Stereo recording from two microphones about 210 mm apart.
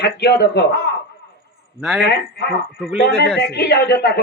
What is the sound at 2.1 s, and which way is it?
Speech, 50° left (ahead or behind).